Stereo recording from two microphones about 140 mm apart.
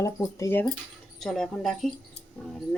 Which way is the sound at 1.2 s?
5° left (ahead or behind).